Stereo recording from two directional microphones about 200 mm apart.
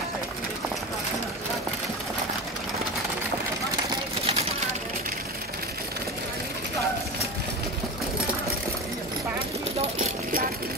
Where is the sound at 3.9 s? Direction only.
30° right (ahead or behind).